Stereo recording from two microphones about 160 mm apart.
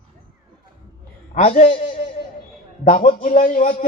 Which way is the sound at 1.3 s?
50° left (ahead or behind).